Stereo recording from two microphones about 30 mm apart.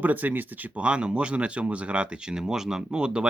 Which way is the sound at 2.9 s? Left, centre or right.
Right.